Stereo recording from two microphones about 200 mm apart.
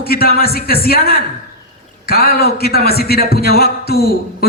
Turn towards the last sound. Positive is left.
turn(degrees=50)  # may be behind; listen again after turning